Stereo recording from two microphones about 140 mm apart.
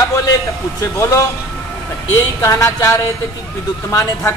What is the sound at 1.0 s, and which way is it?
A man's voice, 20° left (ahead or behind).